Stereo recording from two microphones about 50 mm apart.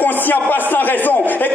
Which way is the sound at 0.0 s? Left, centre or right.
Left.